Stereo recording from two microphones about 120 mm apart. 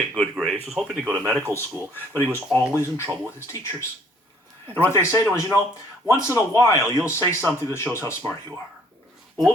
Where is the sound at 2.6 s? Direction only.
20° left (ahead or behind).